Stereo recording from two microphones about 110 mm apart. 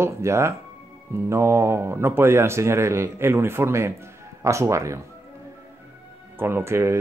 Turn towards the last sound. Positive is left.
turn(degrees=-25)  # may be behind; listen again after turning